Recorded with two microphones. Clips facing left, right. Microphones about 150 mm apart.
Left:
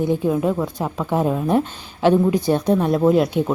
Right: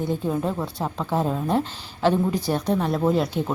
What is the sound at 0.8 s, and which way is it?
Speech, 15° left (ahead or behind).